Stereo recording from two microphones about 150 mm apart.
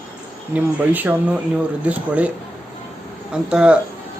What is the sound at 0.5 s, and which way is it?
Speech, 10° right (ahead or behind).